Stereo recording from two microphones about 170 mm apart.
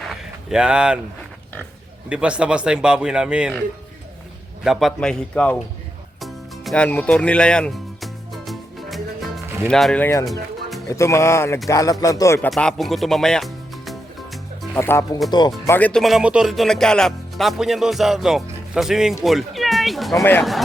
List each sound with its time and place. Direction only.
0.1 s a sound: 5° right (ahead or behind)
2.0 s speech: 5° right (ahead or behind)
4.6 s speech: centre (ahead or behind)
6.2 s music: 5° left (ahead or behind)
10.2 s music: centre (ahead or behind)
10.8 s speech: 15° left (ahead or behind)
12.5 s music: 5° left (ahead or behind)
14.8 s speech: 15° left (ahead or behind)
15.6 s speech: 10° left (ahead or behind)
20.1 s speech: 10° left (ahead or behind)